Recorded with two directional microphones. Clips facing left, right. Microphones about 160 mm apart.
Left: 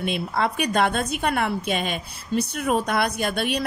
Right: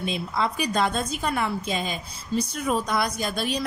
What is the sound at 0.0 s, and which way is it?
A woman's voice, 60° left (ahead or behind).